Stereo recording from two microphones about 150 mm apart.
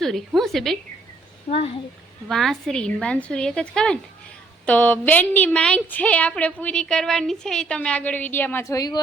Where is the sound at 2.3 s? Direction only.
Centre (ahead or behind).